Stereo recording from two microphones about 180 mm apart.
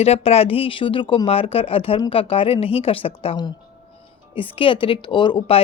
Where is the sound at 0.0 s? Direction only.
35° left (ahead or behind).